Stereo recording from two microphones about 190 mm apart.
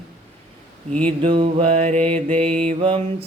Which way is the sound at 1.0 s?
30° right (ahead or behind).